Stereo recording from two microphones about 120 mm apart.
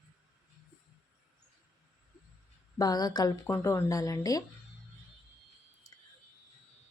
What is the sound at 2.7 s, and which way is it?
Speech, 35° left (ahead or behind).